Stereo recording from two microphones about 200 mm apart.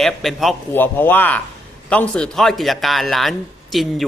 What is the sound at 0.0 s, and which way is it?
A man's voice, centre (ahead or behind).